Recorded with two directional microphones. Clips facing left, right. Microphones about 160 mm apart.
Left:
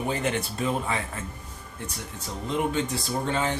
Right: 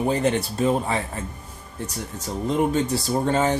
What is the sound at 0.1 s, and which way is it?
Speech, 35° right (ahead or behind).